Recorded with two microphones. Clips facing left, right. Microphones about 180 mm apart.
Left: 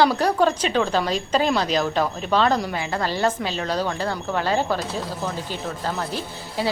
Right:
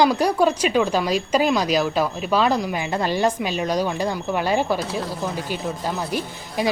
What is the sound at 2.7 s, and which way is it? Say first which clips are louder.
Speech: right 2 dB; 20° right (ahead or behind).